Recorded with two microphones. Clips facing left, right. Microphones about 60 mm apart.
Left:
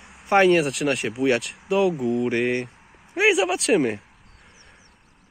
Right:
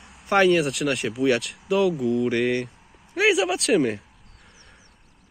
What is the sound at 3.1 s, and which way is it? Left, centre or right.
Speech, centre.